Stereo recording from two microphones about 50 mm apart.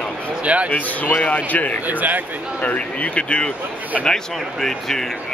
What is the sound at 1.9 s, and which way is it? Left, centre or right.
Speech, right.